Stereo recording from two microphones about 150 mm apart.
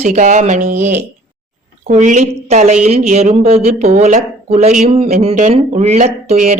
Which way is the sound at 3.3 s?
40° right (ahead or behind).